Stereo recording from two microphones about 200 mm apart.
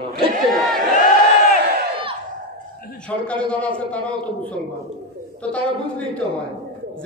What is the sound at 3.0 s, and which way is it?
A man's voice, 5° left (ahead or behind).